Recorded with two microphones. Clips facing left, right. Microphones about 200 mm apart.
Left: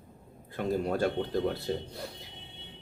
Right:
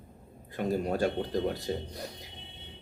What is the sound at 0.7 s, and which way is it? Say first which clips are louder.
Speech: even; 15° right (ahead or behind).